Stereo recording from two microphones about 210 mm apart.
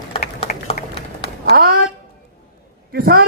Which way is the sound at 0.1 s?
25° left (ahead or behind).